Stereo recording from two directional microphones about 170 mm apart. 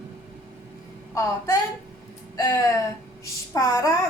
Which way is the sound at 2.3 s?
20° left (ahead or behind).